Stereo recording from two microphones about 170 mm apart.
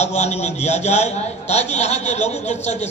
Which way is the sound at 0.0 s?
40° left (ahead or behind).